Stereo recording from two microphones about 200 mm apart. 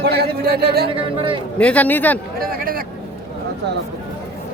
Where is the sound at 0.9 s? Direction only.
25° right (ahead or behind).